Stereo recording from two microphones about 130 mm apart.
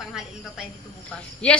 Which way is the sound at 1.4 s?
10° left (ahead or behind).